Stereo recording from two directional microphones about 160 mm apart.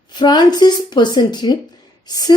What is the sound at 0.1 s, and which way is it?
A woman's voice, 25° left (ahead or behind).